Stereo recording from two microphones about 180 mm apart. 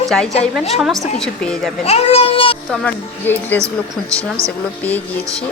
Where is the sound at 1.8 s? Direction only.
35° left (ahead or behind).